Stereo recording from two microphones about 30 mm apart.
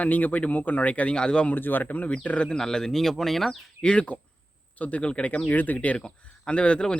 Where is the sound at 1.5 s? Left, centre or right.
Left.